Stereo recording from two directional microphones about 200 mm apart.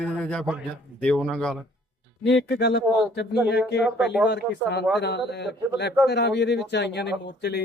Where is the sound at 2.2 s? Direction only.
55° left (ahead or behind).